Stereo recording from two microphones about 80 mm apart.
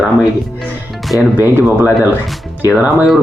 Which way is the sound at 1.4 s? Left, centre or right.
Right.